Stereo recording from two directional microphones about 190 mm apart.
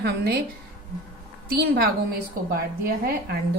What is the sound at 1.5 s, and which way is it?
A woman's voice, 55° right (ahead or behind).